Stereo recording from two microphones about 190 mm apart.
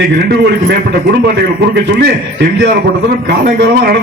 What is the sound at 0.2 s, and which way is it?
A man's voice, 55° right (ahead or behind).